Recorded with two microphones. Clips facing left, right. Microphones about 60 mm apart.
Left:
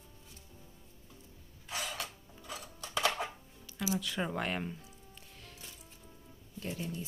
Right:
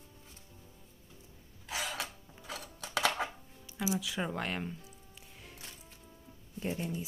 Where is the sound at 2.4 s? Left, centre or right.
Right.